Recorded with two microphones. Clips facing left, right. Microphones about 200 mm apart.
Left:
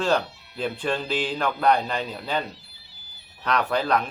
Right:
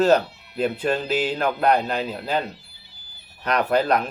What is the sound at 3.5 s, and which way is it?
Speech, 5° right (ahead or behind).